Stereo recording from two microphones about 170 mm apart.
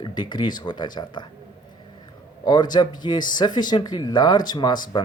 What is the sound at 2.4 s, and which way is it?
Speech, 25° left (ahead or behind).